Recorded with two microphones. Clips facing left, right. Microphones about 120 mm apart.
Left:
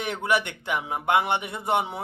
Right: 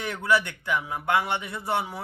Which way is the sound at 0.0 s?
20° left (ahead or behind).